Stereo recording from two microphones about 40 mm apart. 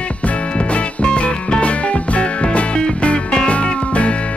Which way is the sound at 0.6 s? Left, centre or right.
Left.